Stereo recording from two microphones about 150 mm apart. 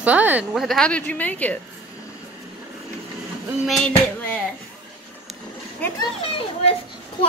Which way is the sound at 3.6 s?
5° left (ahead or behind).